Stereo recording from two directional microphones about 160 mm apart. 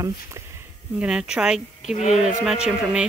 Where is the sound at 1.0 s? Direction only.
5° right (ahead or behind).